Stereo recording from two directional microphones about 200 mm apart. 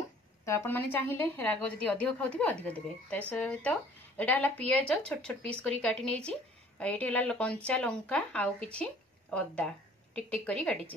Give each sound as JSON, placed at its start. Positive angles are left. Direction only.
{"t": 0.5, "sound": "a woman's voice", "side_deg": 10}